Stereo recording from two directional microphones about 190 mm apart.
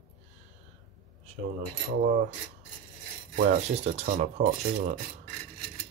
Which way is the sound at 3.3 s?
40° right (ahead or behind).